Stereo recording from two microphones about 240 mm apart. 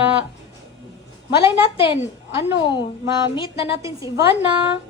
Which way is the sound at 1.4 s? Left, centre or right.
Centre.